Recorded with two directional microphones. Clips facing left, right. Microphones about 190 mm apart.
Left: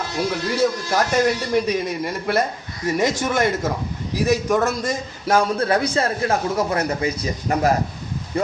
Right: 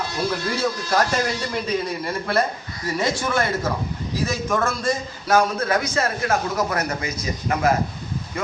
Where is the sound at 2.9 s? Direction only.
20° left (ahead or behind).